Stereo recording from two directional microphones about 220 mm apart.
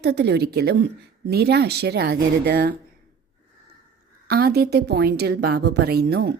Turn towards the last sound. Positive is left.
turn(degrees=-50)  # may be behind; listen again after turning